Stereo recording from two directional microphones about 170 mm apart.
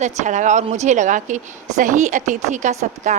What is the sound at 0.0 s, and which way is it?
Speech, 45° right (ahead or behind).